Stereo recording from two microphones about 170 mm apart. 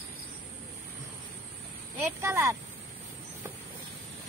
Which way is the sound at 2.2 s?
15° right (ahead or behind).